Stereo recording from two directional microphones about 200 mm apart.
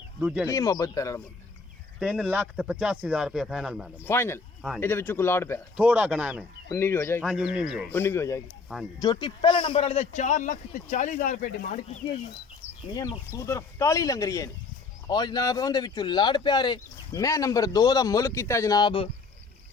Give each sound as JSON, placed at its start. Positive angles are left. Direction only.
{"t": 0.2, "sound": "speech", "side_deg": -5}
{"t": 0.4, "sound": "speech", "side_deg": 15}
{"t": 2.0, "sound": "speech", "side_deg": -5}
{"t": 4.0, "sound": "speech", "side_deg": 10}
{"t": 5.7, "sound": "speech", "side_deg": -5}
{"t": 6.7, "sound": "speech", "side_deg": 10}
{"t": 7.3, "sound": "speech", "side_deg": -5}
{"t": 7.9, "sound": "a man's voice", "side_deg": 10}
{"t": 12.9, "sound": "speech", "side_deg": 20}